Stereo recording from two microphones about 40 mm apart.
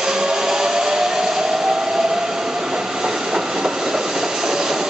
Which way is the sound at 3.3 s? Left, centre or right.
Centre.